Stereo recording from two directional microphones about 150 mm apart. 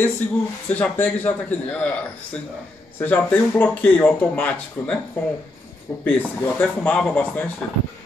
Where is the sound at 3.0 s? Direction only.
10° left (ahead or behind).